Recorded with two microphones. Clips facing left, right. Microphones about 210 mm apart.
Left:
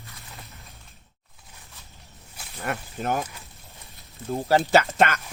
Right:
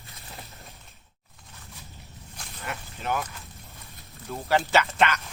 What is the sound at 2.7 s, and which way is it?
Speech, 45° left (ahead or behind).